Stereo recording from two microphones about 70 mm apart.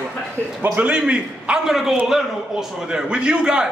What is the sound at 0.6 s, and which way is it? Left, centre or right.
A man's voice, centre.